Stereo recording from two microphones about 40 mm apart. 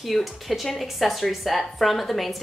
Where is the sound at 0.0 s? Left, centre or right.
Centre.